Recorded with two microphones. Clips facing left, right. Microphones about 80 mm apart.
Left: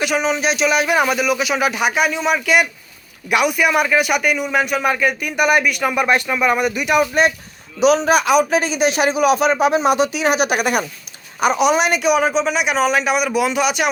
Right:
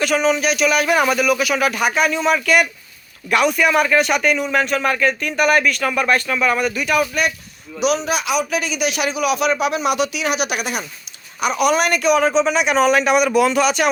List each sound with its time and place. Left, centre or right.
0.0 s a man's voice: centre
7.1 s a man's voice: left
11.5 s a man's voice: centre